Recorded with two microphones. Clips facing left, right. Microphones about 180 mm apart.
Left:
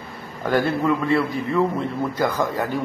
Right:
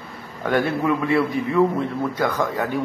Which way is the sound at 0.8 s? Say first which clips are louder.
Even; 10° right (ahead or behind).